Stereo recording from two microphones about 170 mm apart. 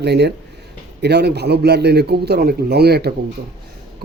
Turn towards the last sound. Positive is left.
turn(degrees=-70)  # may be behind; listen again after turning